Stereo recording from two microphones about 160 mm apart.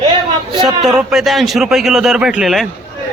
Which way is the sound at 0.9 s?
Centre (ahead or behind).